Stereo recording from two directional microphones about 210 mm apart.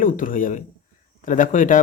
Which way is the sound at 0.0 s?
40° left (ahead or behind).